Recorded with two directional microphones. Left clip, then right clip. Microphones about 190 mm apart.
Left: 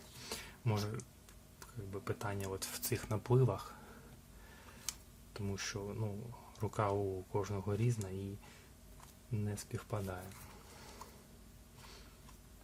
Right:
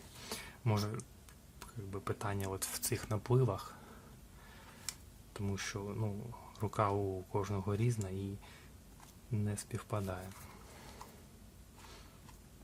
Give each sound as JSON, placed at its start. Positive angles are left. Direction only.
{"t": 0.3, "sound": "a sound", "side_deg": -15}
{"t": 1.5, "sound": "speech", "side_deg": -15}
{"t": 4.9, "sound": "tick-tock", "side_deg": -15}
{"t": 6.6, "sound": "speech", "side_deg": -15}
{"t": 9.3, "sound": "speech", "side_deg": -15}